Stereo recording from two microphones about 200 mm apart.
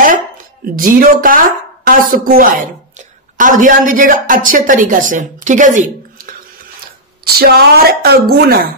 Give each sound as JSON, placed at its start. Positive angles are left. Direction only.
{"t": 0.7, "sound": "speech", "side_deg": -45}
{"t": 7.2, "sound": "speech", "side_deg": -50}